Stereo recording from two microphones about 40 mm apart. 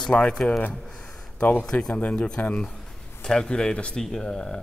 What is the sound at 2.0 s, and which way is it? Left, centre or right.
Speech, left.